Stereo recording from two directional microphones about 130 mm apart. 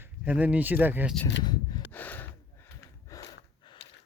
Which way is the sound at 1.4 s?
35° left (ahead or behind).